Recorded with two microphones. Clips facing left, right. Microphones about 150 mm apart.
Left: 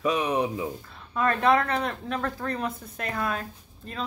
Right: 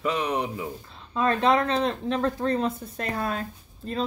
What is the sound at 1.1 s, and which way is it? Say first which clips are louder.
Speech: right 1 dB; 25° right (ahead or behind).